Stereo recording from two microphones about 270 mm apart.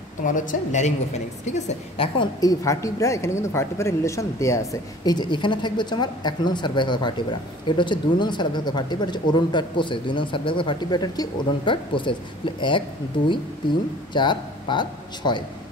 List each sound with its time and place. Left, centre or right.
0.2 s a woman's voice: left
14.1 s speech: centre